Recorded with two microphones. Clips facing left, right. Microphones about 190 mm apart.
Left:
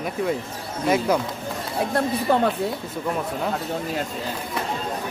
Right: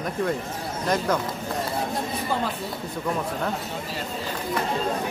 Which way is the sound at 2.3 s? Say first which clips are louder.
Left 7 dB; 65° left (ahead or behind).